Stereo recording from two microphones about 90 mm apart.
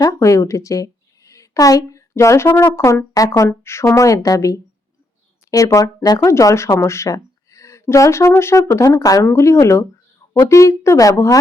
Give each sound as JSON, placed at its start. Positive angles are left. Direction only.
{"t": 0.0, "sound": "a woman's voice", "side_deg": 35}